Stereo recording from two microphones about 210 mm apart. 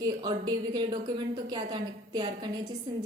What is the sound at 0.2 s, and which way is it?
Speech, 20° right (ahead or behind).